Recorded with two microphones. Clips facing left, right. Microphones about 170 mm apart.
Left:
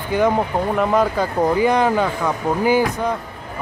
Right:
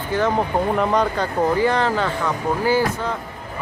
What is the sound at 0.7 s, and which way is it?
Speech, 5° left (ahead or behind).